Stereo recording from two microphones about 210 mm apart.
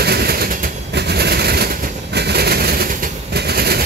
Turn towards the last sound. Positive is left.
turn(degrees=-45)  # may be behind; listen again after turning